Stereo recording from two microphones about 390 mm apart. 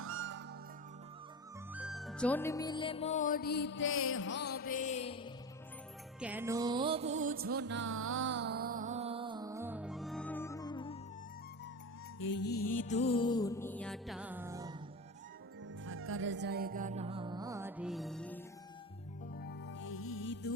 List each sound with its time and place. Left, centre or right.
0.0 s music: right
1.7 s music: centre
6.1 s music: centre
12.2 s music: left; by 14.8 s centre
15.9 s music: right; by 18.3 s centre
19.4 s music: left